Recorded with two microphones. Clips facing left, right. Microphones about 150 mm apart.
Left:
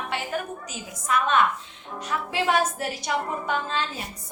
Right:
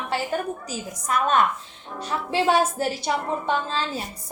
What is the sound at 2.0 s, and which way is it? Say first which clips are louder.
A woman's voice: right 3 dB; 30° right (ahead or behind).